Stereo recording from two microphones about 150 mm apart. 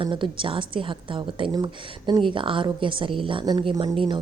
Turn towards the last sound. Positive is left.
turn(degrees=-35)  # may be behind; listen again after turning